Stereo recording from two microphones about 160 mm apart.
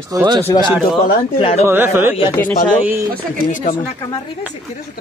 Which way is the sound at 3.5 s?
55° left (ahead or behind).